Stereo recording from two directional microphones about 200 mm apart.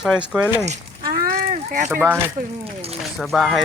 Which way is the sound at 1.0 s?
50° right (ahead or behind).